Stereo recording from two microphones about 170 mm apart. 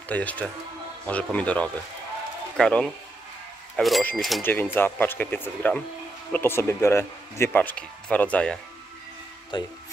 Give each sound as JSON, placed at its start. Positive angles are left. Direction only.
{"t": 0.1, "sound": "speech", "side_deg": 10}
{"t": 9.5, "sound": "speech", "side_deg": 25}